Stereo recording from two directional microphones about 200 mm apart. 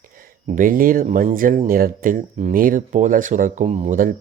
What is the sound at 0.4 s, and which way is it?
Speech, 40° right (ahead or behind).